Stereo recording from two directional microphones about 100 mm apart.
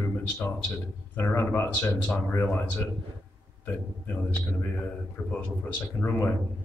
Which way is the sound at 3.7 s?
20° left (ahead or behind).